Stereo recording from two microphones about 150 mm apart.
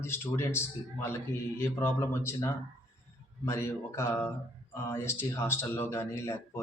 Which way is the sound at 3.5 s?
15° left (ahead or behind).